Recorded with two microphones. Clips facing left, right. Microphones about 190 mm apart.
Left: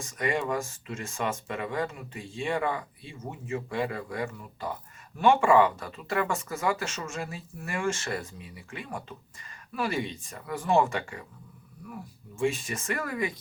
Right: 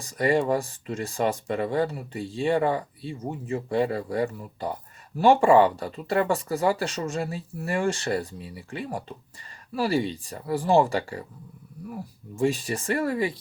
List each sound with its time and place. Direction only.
0.0 s speech: 35° right (ahead or behind)